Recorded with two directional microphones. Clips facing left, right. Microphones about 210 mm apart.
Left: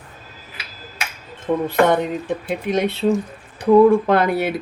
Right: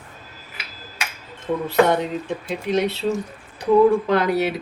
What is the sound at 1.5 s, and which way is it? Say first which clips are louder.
Speech: left 1 dB; 55° left (ahead or behind).